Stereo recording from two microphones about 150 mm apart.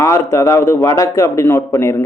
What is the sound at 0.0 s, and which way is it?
Speech, 20° left (ahead or behind).